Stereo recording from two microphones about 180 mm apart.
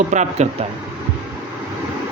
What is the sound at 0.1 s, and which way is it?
Speech, 40° right (ahead or behind).